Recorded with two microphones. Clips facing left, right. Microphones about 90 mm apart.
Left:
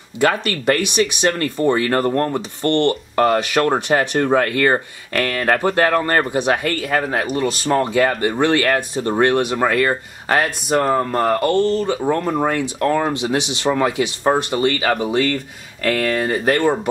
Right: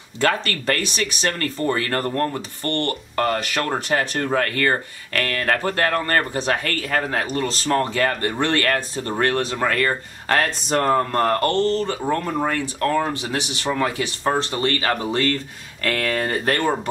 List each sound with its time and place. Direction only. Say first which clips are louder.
0.2 s speech: left 3 dB; 10° left (ahead or behind)